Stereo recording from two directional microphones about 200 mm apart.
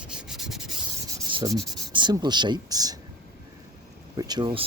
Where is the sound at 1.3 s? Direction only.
20° right (ahead or behind).